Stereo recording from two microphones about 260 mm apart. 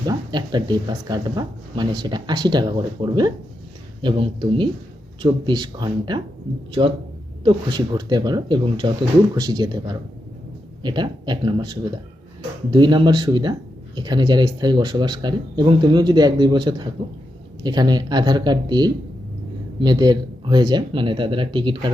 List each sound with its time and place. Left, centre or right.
0.0 s speech: centre